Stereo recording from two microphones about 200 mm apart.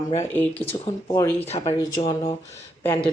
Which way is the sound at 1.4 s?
30° left (ahead or behind).